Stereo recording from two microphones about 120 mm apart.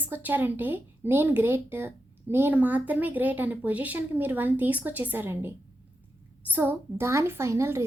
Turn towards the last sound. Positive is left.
turn(degrees=-25)  # may be behind; listen again after turning